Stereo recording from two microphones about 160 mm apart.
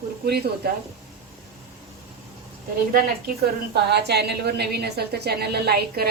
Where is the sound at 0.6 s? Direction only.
75° right (ahead or behind).